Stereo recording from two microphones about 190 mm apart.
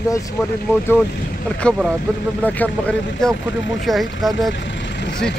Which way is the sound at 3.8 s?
Centre (ahead or behind).